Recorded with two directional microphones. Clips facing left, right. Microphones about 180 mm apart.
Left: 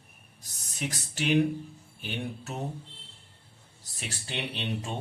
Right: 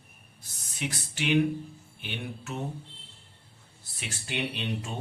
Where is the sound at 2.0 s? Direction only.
40° left (ahead or behind).